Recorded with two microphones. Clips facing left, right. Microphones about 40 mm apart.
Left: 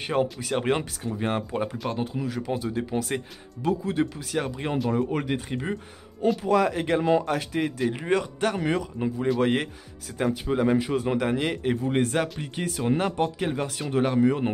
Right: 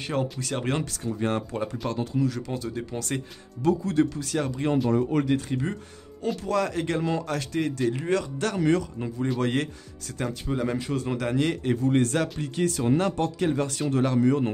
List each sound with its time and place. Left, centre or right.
0.0 s speech: centre